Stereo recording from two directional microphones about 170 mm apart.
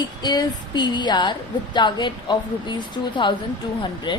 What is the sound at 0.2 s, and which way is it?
A woman's voice, 25° left (ahead or behind).